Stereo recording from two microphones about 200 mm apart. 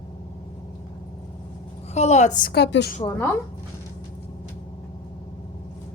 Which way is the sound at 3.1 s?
10° left (ahead or behind).